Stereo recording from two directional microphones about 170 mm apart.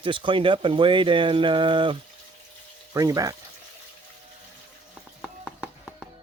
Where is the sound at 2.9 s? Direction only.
20° right (ahead or behind).